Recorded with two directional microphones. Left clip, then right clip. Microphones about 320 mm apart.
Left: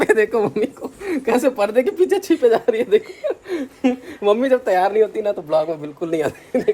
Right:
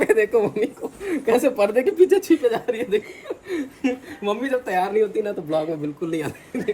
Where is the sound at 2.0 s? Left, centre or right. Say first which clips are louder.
Left 3 dB; left.